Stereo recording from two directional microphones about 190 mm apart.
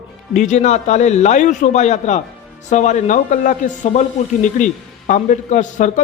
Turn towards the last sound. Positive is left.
turn(degrees=40)  # may be behind; listen again after turning